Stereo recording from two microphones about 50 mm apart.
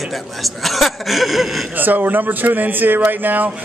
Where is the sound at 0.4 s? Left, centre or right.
Centre.